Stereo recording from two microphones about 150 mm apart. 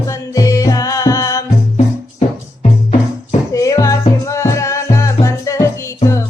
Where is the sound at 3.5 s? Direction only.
20° left (ahead or behind).